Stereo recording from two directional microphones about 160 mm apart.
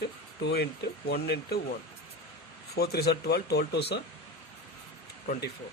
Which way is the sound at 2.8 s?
80° left.